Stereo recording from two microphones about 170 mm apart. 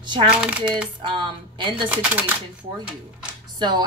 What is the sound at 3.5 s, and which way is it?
Speech, 25° right (ahead or behind).